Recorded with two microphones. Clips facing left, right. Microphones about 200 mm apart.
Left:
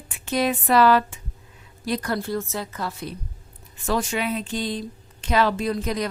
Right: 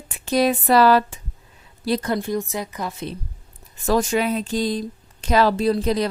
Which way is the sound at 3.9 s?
40° right (ahead or behind).